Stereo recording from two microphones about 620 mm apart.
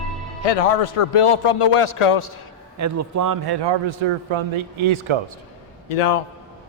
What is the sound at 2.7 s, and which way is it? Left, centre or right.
A man's voice, right.